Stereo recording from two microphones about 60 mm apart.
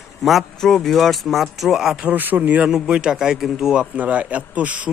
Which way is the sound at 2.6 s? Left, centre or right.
Centre.